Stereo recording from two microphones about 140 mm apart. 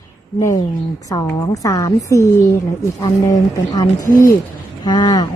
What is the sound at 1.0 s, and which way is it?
Speech, 25° left (ahead or behind).